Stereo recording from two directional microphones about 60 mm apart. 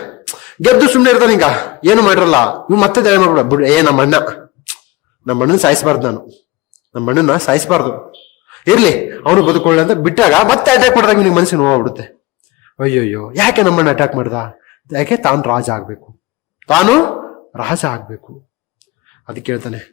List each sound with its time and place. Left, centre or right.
0.2 s a man's voice: centre
19.2 s a man's voice: centre